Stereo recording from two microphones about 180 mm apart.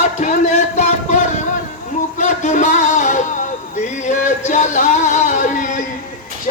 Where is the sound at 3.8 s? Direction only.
40° left (ahead or behind).